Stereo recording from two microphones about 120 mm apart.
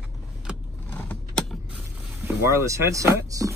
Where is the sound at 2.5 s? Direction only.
25° right (ahead or behind).